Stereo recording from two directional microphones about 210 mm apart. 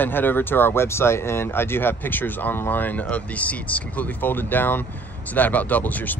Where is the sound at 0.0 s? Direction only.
10° left (ahead or behind).